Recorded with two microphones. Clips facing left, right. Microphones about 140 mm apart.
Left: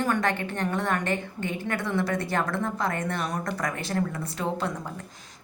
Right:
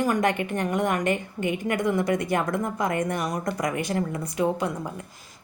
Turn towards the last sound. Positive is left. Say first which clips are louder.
# right 2 dB
turn(degrees=-15)  # may be behind; listen again after turning